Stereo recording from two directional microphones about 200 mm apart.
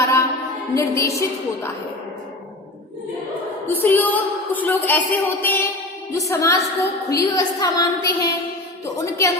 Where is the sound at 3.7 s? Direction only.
10° left (ahead or behind).